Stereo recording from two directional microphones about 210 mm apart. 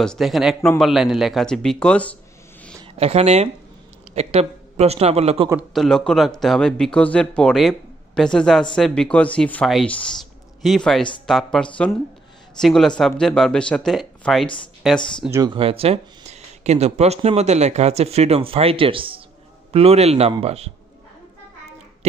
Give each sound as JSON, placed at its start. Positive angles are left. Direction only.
{"t": 0.0, "sound": "speech", "side_deg": 0}
{"t": 2.8, "sound": "a man's voice", "side_deg": -30}
{"t": 5.7, "sound": "speech", "side_deg": 0}
{"t": 15.3, "sound": "speech", "side_deg": -20}